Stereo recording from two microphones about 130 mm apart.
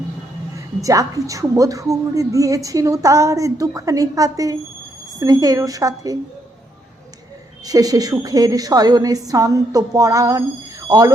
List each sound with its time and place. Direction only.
0.5 s a woman's voice: 25° right (ahead or behind)
7.6 s a woman's voice: 30° right (ahead or behind)